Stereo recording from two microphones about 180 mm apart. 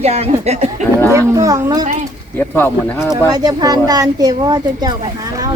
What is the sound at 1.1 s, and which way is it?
Speech, 15° right (ahead or behind).